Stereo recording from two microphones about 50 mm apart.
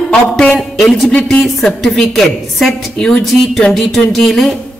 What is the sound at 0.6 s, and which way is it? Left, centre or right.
A woman's voice, centre.